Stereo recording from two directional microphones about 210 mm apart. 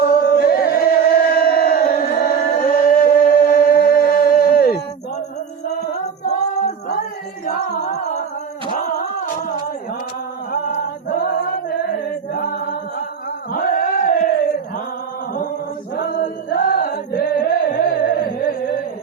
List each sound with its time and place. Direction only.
0.0 s music: 50° left (ahead or behind)
1.4 s a sound: 45° left (ahead or behind)
6.2 s singing: 30° left (ahead or behind)
7.4 s music: 35° left (ahead or behind)
8.7 s a sound: 45° left (ahead or behind)
10.5 s a sound: 40° left (ahead or behind)
12.3 s chant: 45° left (ahead or behind)
13.5 s battle cry: 45° left (ahead or behind)
16.0 s singing: 45° left (ahead or behind)